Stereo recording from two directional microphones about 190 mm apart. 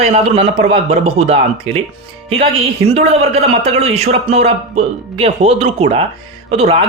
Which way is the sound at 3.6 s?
30° right (ahead or behind).